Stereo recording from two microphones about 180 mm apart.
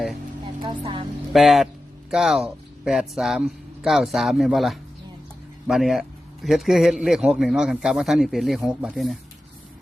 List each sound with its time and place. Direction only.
0.6 s vehicle: 30° right (ahead or behind)
1.3 s a man's voice: centre (ahead or behind)